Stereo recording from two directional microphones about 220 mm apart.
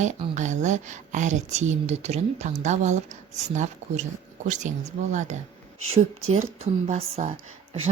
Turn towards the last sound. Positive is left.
turn(degrees=-35)  # may be behind; listen again after turning